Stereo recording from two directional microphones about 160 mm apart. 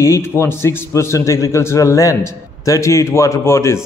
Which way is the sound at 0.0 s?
15° left (ahead or behind).